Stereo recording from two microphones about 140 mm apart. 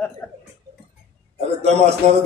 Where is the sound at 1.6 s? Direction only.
50° right (ahead or behind).